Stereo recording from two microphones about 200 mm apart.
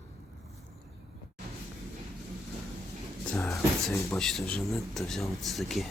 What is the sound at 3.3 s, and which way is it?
Speech, 15° left (ahead or behind).